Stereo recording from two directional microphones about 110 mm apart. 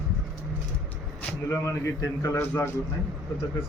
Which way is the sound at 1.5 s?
25° left (ahead or behind).